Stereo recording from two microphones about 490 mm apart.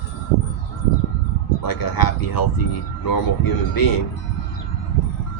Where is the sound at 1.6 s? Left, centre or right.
Left.